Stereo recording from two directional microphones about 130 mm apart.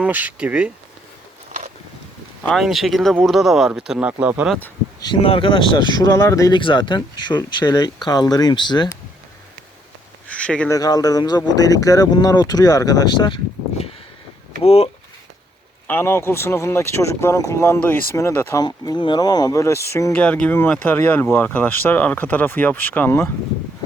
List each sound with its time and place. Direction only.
0.0 s speech: 10° right (ahead or behind)
2.4 s speech: 5° left (ahead or behind)
4.9 s speech: 30° left (ahead or behind)
5.2 s speech: 45° left (ahead or behind); by 6.6 s 25° left (ahead or behind)
6.6 s speech: 40° left (ahead or behind)
10.2 s a sound: 10° left (ahead or behind)
10.7 s speech: 30° left (ahead or behind)
14.6 s speech: 50° left (ahead or behind)
15.9 s speech: 15° left (ahead or behind)
20.1 s speech: 10° left (ahead or behind)